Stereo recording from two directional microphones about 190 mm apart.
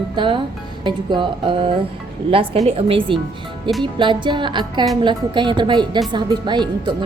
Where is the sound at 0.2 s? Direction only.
25° right (ahead or behind).